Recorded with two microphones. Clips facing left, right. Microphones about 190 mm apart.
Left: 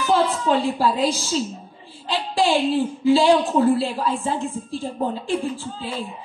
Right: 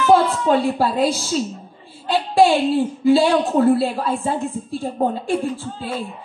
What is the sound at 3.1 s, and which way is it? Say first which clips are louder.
A woman's voice: right 1 dB; 60° right (ahead or behind).